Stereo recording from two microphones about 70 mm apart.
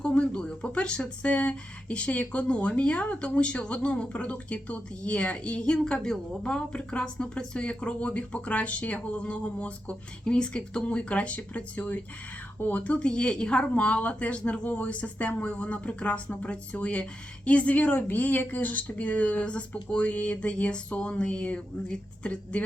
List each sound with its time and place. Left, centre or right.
0.0 s speech: centre